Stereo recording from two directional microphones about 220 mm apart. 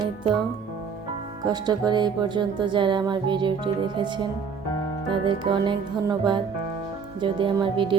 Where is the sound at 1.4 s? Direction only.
20° right (ahead or behind).